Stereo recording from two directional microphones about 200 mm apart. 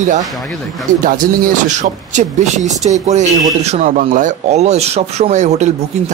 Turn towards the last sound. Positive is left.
turn(degrees=-35)  # may be behind; listen again after turning